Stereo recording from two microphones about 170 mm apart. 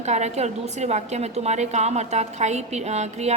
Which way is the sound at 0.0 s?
40° right (ahead or behind).